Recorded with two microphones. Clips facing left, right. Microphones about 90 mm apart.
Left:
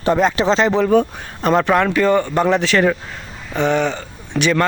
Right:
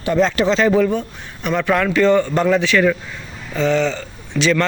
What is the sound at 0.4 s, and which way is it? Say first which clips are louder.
Speech: right 1 dB; 25° left (ahead or behind).